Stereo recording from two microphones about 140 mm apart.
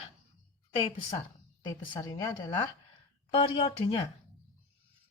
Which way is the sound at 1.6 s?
30° left (ahead or behind).